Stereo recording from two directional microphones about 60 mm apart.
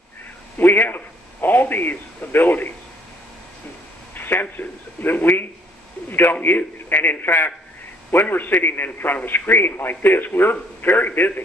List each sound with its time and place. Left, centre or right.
0.6 s a man's voice: left
4.1 s a man's voice: left